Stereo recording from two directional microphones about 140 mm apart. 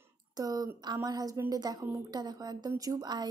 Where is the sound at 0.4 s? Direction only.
25° right (ahead or behind).